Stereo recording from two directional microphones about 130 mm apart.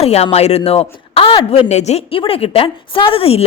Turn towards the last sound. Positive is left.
turn(degrees=50)  # may be behind; listen again after turning